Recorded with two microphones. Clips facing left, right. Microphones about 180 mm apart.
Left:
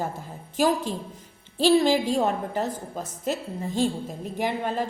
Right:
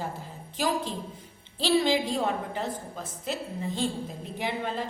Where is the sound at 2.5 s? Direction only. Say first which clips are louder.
Left 5 dB; 45° left (ahead or behind).